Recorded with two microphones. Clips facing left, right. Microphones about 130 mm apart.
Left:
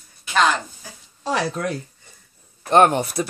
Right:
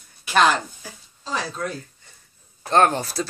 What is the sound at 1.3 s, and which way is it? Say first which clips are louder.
Speech: left 5 dB; 70° left (ahead or behind).